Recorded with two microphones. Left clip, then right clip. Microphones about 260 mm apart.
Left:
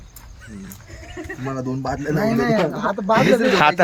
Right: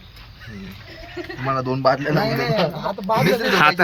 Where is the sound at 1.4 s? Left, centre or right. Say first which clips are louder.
Right 8 dB; centre.